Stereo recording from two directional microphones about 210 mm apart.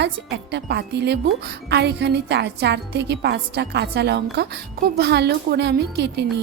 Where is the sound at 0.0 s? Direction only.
55° right (ahead or behind).